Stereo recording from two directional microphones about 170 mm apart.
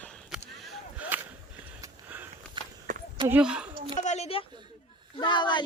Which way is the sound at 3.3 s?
5° right (ahead or behind).